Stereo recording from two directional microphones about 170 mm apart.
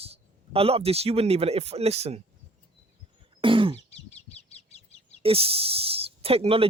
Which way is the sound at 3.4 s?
30° right (ahead or behind).